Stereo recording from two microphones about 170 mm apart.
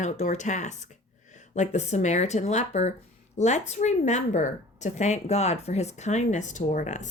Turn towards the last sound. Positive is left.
turn(degrees=45)  # may be behind; listen again after turning